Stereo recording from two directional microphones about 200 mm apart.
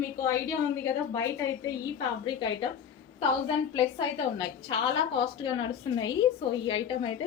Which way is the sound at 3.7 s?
25° left (ahead or behind).